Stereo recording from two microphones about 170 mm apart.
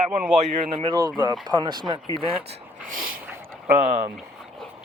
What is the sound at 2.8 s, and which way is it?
Speech, 55° right (ahead or behind).